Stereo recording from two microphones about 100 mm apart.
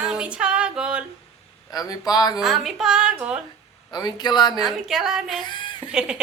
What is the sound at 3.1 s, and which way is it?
Music, 10° right (ahead or behind).